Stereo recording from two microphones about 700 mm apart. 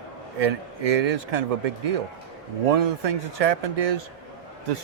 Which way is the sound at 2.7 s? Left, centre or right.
Right.